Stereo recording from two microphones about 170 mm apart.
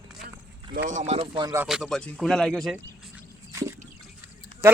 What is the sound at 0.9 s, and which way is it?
Speech, 40° right (ahead or behind).